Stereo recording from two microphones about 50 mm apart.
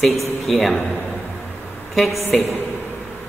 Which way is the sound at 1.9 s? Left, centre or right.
Centre.